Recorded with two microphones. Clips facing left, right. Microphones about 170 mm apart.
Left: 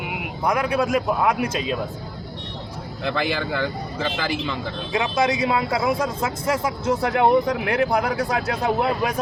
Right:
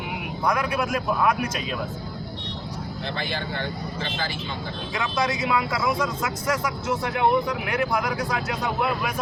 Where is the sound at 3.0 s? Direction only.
90° left.